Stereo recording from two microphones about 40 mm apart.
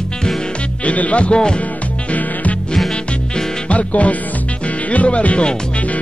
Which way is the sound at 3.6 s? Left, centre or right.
Left.